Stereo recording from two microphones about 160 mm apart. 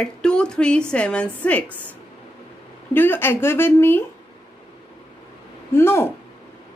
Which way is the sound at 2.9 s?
15° left (ahead or behind).